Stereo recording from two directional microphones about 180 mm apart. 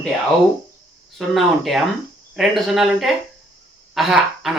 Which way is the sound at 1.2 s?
Centre (ahead or behind).